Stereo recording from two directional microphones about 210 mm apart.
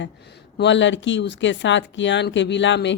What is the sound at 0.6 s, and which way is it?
Speech, 60° left (ahead or behind).